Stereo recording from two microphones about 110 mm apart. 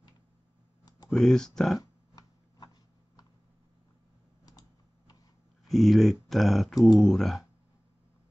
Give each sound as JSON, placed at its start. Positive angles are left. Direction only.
{"t": 0.8, "sound": "computer keyboard", "side_deg": 35}
{"t": 1.1, "sound": "speech", "side_deg": 5}
{"t": 1.8, "sound": "a sound", "side_deg": 35}
{"t": 4.5, "sound": "typing", "side_deg": 35}
{"t": 5.7, "sound": "speech", "side_deg": 0}